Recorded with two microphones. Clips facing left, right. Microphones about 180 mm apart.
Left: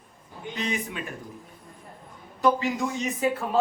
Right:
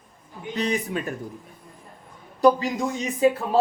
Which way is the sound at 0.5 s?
40° right (ahead or behind).